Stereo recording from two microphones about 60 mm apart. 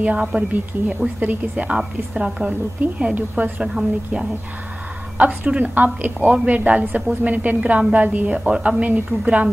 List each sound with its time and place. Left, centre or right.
0.0 s a woman's voice: centre
3.2 s a woman's voice: right
3.6 s a woman's voice: centre